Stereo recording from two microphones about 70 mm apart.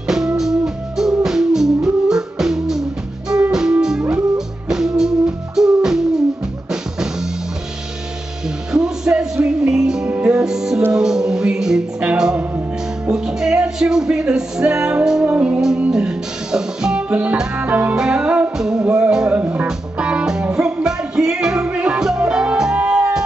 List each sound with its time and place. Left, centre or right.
0.4 s music: centre
4.6 s music: centre
8.7 s music: centre
12.4 s music: right
13.1 s music: centre
19.4 s music: right
20.0 s music: centre